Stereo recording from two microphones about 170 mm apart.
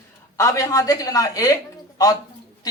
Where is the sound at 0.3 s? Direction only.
20° left (ahead or behind).